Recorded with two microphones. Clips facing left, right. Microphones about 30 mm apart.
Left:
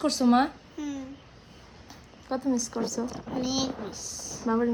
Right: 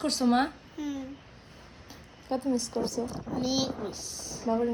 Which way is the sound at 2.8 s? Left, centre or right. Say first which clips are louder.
Even; centre.